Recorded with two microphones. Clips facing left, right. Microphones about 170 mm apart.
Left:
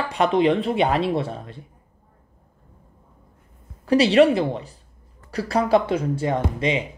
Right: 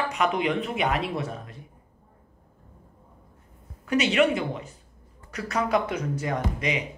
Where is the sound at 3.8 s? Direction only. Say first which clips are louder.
Left 7 dB; 35° left (ahead or behind).